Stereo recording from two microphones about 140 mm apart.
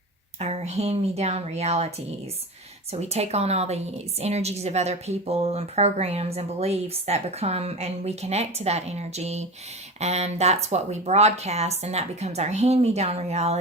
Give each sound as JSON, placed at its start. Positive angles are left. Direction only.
{"t": 0.3, "sound": "a woman's voice", "side_deg": -50}
{"t": 2.9, "sound": "a woman's voice", "side_deg": -50}